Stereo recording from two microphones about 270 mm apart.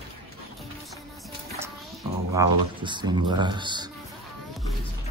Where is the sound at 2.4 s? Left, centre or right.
Centre.